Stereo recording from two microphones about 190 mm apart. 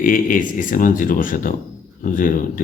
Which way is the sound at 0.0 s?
45° left (ahead or behind).